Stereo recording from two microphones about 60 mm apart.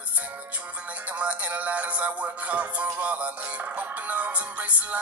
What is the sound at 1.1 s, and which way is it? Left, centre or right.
Music, right.